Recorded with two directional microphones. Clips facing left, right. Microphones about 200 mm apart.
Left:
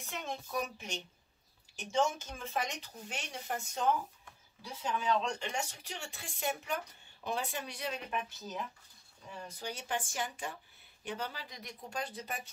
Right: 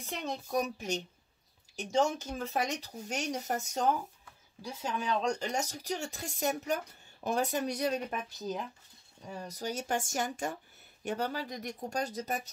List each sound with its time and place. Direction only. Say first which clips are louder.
0.0 s speech: right 4 dB; 40° right (ahead or behind)